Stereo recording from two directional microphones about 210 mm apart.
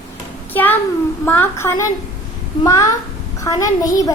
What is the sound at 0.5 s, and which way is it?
A child's voice, 10° left (ahead or behind).